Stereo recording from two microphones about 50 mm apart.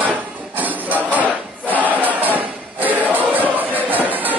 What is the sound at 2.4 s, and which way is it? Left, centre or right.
Music, right.